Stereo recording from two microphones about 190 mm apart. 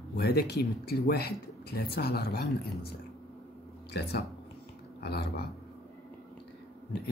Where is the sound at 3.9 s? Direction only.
60° left (ahead or behind).